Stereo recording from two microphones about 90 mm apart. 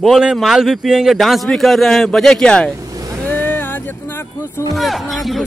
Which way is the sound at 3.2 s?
20° left (ahead or behind).